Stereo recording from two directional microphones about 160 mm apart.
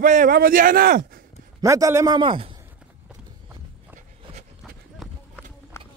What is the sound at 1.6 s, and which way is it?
Speech, 20° right (ahead or behind).